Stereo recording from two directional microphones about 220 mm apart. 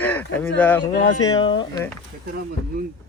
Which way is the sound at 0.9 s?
20° left (ahead or behind).